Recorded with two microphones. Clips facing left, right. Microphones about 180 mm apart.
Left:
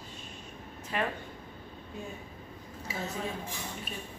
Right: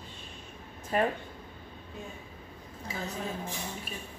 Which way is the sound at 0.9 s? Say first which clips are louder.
Right 5 dB; 40° right (ahead or behind).